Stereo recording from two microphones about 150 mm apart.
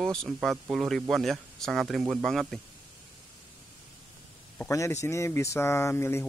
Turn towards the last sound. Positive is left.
turn(degrees=15)  # may be behind; listen again after turning